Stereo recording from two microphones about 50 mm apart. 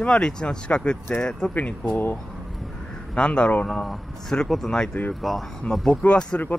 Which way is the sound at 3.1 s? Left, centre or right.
Left.